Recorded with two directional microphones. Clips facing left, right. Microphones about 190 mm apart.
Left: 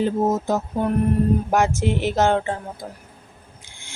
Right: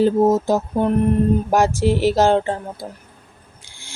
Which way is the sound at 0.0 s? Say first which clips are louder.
Right 5 dB; 30° right (ahead or behind).